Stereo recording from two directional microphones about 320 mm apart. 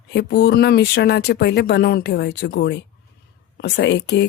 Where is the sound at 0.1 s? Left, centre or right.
Left.